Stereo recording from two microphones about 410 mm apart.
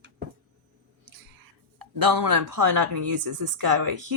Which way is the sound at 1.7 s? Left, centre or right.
Right.